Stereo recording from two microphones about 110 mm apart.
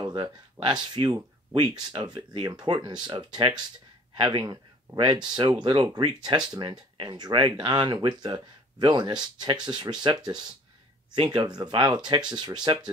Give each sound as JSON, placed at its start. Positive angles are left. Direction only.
{"t": 0.0, "sound": "speech", "side_deg": -45}